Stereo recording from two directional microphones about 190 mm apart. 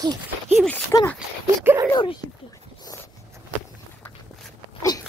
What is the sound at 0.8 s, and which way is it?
Speech, 10° left (ahead or behind).